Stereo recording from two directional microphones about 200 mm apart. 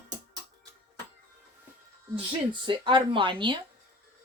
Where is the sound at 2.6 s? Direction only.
25° right (ahead or behind).